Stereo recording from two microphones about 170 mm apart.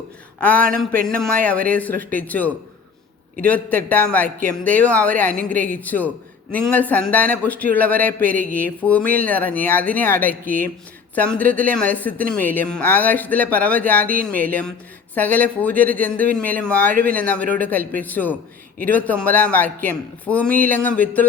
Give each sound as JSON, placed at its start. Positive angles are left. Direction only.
{"t": 0.3, "sound": "speech", "side_deg": 10}